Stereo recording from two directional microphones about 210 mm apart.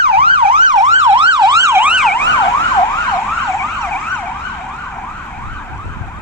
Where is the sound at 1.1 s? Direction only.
20° right (ahead or behind); by 2.1 s 5° right (ahead or behind).